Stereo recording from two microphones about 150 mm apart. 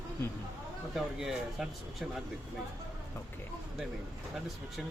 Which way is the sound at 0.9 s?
Centre (ahead or behind).